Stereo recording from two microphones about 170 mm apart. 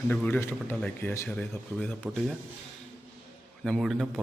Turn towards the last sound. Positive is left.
turn(degrees=0)  # may be behind; listen again after turning